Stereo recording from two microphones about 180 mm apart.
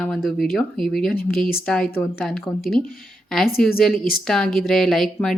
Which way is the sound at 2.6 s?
55° left (ahead or behind).